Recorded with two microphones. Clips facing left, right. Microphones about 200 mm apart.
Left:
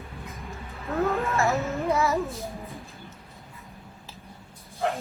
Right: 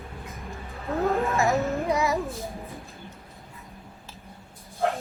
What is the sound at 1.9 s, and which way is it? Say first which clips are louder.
Child singing: left 4 dB; 15° right (ahead or behind).